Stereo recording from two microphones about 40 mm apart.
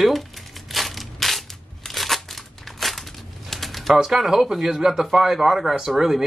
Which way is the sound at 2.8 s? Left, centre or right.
Centre.